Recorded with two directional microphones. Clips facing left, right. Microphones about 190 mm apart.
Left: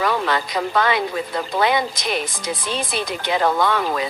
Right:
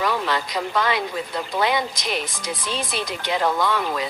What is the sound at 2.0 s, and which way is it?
Speech, 55° left (ahead or behind).